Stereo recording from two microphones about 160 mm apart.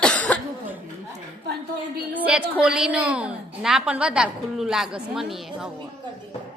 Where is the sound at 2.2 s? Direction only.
10° right (ahead or behind).